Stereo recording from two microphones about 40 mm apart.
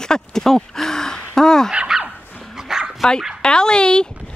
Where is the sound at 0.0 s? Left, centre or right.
Centre.